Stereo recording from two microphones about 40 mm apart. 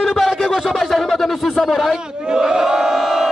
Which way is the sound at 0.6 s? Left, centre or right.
Centre.